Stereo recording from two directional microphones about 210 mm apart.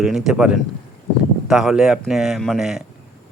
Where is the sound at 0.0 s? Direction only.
Centre (ahead or behind).